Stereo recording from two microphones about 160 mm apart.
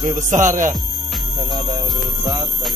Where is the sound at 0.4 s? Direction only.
55° right (ahead or behind).